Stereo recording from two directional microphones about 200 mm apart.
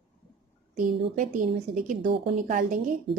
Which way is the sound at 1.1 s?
40° right (ahead or behind).